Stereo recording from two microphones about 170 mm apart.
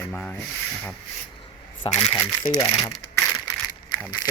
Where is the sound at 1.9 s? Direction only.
35° left (ahead or behind).